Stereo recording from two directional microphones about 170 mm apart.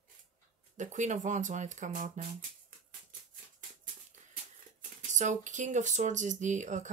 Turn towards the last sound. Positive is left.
turn(degrees=-45)  # may be behind; listen again after turning